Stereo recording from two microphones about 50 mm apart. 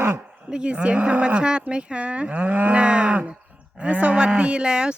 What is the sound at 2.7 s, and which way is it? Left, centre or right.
Moo, right.